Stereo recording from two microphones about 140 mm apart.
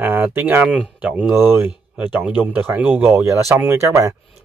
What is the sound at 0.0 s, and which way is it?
Speech, 15° right (ahead or behind).